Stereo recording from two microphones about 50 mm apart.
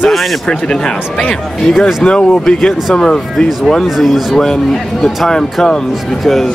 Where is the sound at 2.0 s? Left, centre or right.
Centre.